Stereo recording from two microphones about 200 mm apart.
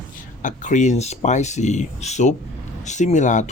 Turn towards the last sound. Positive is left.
turn(degrees=35)  # may be behind; listen again after turning